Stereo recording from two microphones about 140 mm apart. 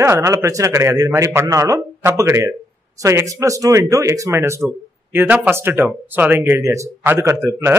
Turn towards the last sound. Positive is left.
turn(degrees=-20)  # may be behind; listen again after turning